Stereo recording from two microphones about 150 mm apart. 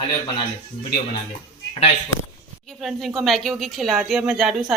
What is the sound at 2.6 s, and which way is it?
A woman's voice, centre (ahead or behind).